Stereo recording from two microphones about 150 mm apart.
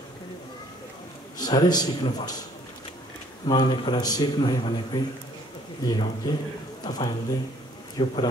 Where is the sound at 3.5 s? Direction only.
30° left (ahead or behind).